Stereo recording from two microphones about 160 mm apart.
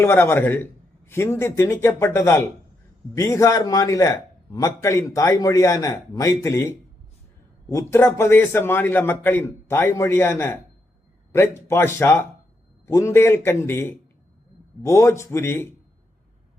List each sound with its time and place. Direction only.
0.0 s a man's voice: 15° left (ahead or behind)